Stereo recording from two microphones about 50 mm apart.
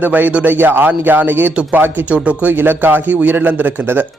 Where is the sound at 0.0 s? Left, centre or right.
Right.